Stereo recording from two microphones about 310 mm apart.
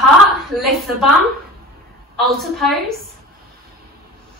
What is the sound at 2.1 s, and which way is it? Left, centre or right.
Speech, centre.